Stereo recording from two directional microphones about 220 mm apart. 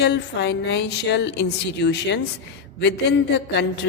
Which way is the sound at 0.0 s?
50° left (ahead or behind).